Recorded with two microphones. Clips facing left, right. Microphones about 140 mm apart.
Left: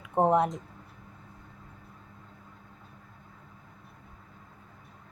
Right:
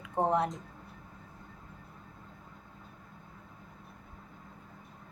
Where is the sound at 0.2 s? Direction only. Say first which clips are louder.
Left 5 dB; 25° left (ahead or behind).